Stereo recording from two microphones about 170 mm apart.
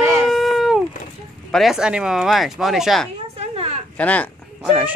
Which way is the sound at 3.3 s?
35° right (ahead or behind).